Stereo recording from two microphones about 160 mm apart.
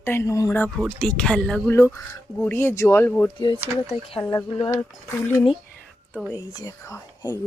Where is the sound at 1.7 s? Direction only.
15° left (ahead or behind).